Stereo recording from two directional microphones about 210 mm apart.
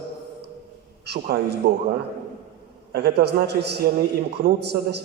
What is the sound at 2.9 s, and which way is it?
A man's voice, 50° right (ahead or behind).